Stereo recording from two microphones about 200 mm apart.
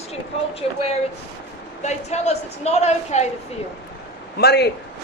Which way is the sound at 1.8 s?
35° left (ahead or behind).